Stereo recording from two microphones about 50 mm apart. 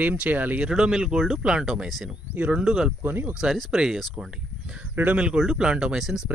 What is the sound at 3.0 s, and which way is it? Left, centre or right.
Speech, right.